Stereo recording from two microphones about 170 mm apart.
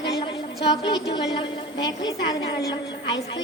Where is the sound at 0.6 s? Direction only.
25° left (ahead or behind).